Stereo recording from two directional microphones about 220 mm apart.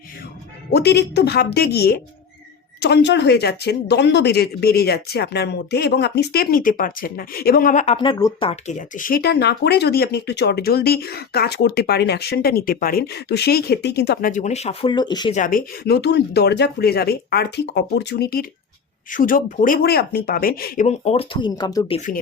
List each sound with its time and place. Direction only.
0.7 s speech: 50° left (ahead or behind)
8.0 s speech: 25° left (ahead or behind)
9.0 s speech: 40° left (ahead or behind); by 15.4 s 20° left (ahead or behind)
15.4 s speech: 40° left (ahead or behind)
20.8 s speech: 30° left (ahead or behind)
21.9 s speech: 35° left (ahead or behind)